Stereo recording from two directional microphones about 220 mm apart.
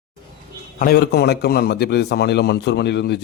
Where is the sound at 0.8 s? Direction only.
45° left (ahead or behind).